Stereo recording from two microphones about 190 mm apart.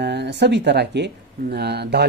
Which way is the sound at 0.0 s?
65° right (ahead or behind).